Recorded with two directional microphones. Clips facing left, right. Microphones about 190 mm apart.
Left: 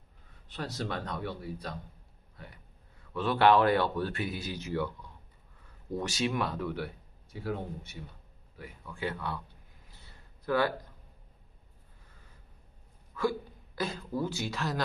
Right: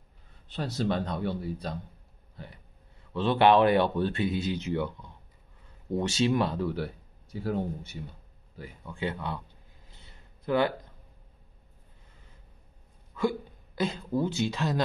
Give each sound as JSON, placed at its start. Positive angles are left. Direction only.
{"t": 0.5, "sound": "speech", "side_deg": -25}
{"t": 3.1, "sound": "speech", "side_deg": -25}
{"t": 9.8, "sound": "a sound", "side_deg": -20}
{"t": 13.1, "sound": "speech", "side_deg": -20}